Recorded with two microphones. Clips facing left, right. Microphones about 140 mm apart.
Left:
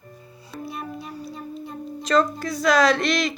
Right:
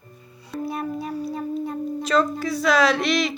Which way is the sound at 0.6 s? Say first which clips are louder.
Right 6 dB; 55° right (ahead or behind).